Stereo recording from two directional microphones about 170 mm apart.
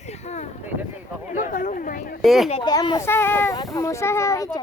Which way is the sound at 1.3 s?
50° left (ahead or behind).